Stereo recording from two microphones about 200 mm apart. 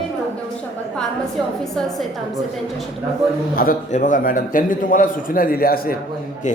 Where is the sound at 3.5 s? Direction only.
40° left (ahead or behind).